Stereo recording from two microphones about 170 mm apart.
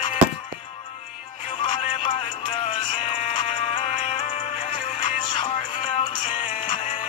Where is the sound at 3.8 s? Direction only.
50° left (ahead or behind).